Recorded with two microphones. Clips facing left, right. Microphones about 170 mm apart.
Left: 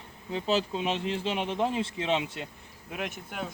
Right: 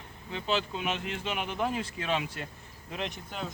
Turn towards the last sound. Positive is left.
turn(degrees=10)  # may be behind; listen again after turning